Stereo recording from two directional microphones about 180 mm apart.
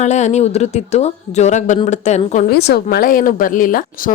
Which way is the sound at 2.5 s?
65° left (ahead or behind).